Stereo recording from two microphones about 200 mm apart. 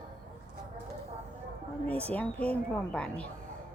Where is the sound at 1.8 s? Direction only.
10° left (ahead or behind).